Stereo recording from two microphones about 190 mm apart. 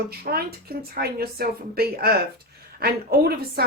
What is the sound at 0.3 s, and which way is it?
A woman's voice, 55° right (ahead or behind).